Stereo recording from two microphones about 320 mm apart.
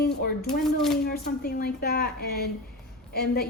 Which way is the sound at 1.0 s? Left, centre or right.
Left.